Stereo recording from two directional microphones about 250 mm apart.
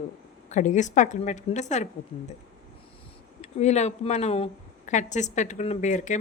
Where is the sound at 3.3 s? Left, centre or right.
Left.